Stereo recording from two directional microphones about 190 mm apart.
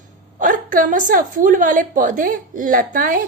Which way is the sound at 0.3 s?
45° right (ahead or behind).